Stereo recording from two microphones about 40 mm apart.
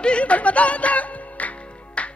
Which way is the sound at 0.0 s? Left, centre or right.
Left.